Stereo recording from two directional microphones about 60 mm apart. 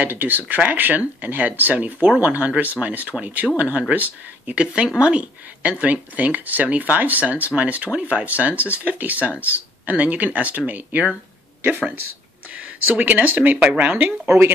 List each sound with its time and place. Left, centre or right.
0.0 s speech: right